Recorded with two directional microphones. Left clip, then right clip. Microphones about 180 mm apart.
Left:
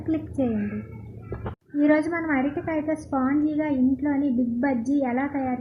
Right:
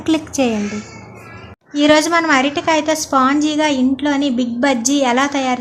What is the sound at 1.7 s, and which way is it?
A woman's voice, 20° right (ahead or behind).